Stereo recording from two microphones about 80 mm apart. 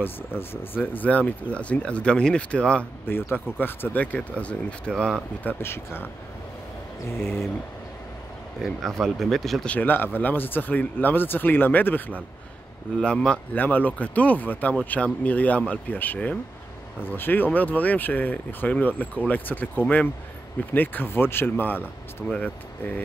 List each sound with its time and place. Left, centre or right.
0.4 s speech: left
3.3 s speech: left; by 5.2 s centre
5.4 s speech: left
7.1 s speech: left
8.6 s speech: centre
9.7 s speech: left
13.0 s speech: centre; by 22.4 s left